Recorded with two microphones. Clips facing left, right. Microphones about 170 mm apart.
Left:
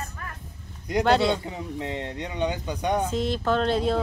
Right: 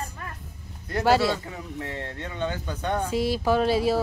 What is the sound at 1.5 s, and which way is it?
Speech, 20° left (ahead or behind).